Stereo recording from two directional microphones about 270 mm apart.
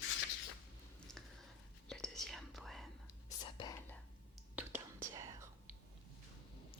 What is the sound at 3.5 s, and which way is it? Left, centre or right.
Whispering, centre.